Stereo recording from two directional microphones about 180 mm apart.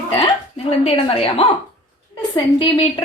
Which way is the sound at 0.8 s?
30° left (ahead or behind).